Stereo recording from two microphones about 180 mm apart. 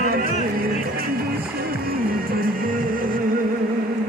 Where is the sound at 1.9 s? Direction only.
55° right (ahead or behind).